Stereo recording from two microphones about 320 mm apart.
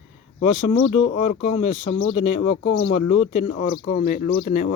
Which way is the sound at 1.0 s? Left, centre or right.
Left.